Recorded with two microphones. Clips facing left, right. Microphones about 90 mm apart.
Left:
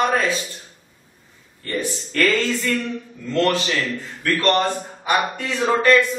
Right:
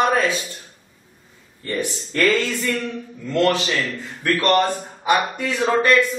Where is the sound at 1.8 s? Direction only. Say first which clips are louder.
Even; 20° right (ahead or behind).